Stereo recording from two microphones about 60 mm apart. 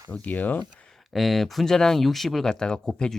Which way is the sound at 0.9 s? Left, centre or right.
Centre.